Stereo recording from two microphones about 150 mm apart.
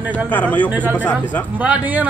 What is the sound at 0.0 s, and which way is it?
Speech, 10° right (ahead or behind).